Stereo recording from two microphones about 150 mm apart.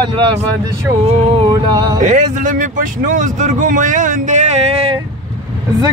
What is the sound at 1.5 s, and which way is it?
Speech, 25° right (ahead or behind).